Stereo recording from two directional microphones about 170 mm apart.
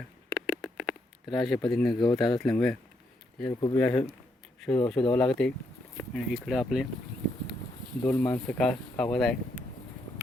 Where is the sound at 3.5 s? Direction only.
25° left (ahead or behind).